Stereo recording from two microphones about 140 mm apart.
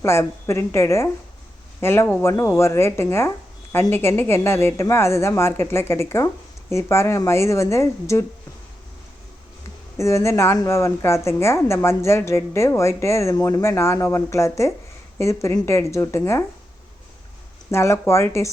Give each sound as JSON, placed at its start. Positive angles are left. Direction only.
{"t": 0.0, "sound": "speech", "side_deg": 20}
{"t": 10.0, "sound": "speech", "side_deg": 20}
{"t": 17.7, "sound": "speech", "side_deg": 20}